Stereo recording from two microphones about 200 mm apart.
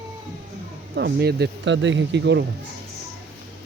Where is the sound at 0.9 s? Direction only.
55° right (ahead or behind).